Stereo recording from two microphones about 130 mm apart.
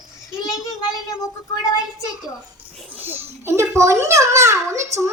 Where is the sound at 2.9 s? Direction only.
15° right (ahead or behind).